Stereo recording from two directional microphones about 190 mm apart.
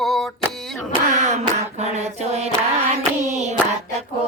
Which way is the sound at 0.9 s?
35° right (ahead or behind).